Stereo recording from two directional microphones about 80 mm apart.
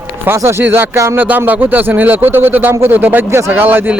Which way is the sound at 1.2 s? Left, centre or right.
Right.